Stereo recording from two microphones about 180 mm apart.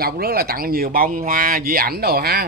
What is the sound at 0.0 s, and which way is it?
Speech, 60° right (ahead or behind).